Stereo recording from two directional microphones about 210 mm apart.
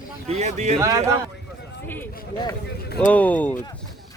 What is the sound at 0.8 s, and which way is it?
Speech, 15° right (ahead or behind).